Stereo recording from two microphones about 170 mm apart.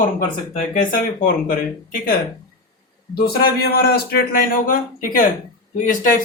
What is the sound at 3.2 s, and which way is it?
A man's voice, 65° left (ahead or behind).